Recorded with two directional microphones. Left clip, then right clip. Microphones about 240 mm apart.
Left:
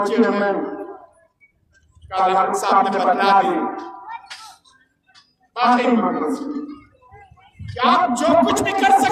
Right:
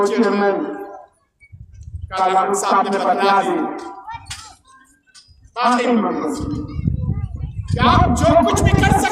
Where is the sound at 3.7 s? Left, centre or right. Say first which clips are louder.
Right 1 dB; right.